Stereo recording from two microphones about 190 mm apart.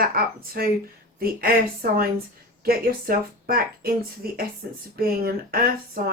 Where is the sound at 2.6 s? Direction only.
50° right (ahead or behind).